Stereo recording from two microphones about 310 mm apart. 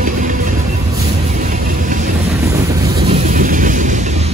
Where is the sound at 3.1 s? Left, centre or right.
Right.